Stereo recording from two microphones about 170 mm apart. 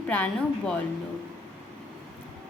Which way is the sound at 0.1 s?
5° left (ahead or behind).